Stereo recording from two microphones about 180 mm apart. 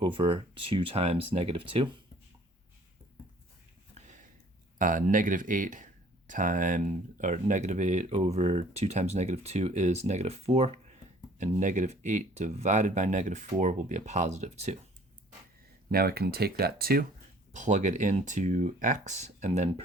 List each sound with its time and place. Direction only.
0.0 s speech: 30° right (ahead or behind)
3.9 s a sound: 40° right (ahead or behind)
4.8 s speech: 50° right (ahead or behind)
15.9 s speech: 60° right (ahead or behind)
17.5 s speech: 45° right (ahead or behind)